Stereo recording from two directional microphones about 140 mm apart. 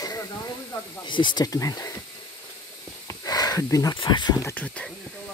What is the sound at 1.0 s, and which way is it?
Speech, 35° left (ahead or behind).